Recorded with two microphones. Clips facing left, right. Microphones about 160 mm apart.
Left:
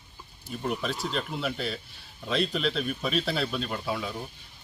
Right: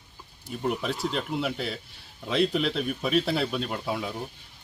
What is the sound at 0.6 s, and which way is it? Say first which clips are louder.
Speech: right 2 dB; 15° right (ahead or behind).